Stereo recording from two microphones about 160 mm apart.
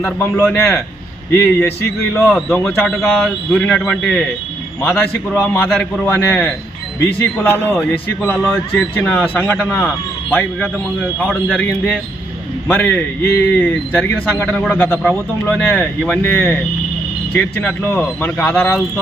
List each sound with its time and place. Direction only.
0.0 s a man's voice: 10° left (ahead or behind)
2.2 s a man's voice: centre (ahead or behind)
5.6 s a man's voice: centre (ahead or behind)